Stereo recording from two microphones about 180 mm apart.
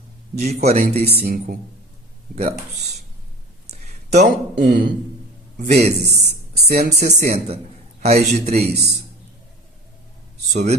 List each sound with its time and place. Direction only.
0.3 s speech: 35° right (ahead or behind)
1.2 s speech: 50° right (ahead or behind)
2.3 s speech: 40° right (ahead or behind)
3.7 s a sound: 40° right (ahead or behind)
4.7 s speech: 50° right (ahead or behind)
5.5 s speech: 35° right (ahead or behind)
10.5 s speech: 40° right (ahead or behind)